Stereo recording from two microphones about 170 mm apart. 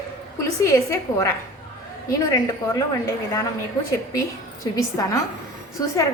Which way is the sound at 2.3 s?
20° left (ahead or behind).